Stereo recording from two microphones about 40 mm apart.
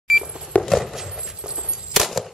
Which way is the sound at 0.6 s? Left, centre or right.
Centre.